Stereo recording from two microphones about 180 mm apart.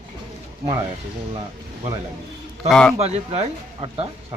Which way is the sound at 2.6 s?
5° left (ahead or behind).